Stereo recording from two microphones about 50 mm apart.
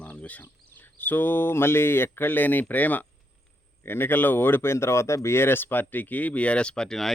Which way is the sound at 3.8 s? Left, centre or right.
Left.